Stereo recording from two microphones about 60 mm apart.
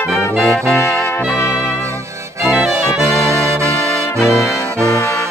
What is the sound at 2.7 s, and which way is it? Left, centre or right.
Music, right.